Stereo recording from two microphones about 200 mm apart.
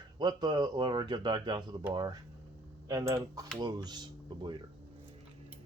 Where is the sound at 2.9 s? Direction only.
15° right (ahead or behind).